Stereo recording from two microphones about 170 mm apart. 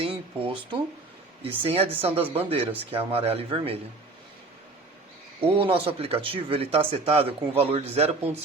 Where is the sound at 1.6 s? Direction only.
35° right (ahead or behind).